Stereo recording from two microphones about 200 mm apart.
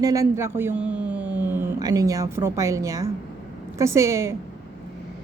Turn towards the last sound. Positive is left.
turn(degrees=-15)  # may be behind; listen again after turning